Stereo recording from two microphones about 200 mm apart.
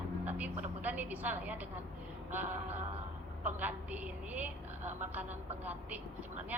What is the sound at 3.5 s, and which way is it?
A woman's voice, 10° right (ahead or behind).